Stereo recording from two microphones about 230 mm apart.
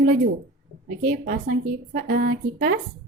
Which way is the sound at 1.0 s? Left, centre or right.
Right.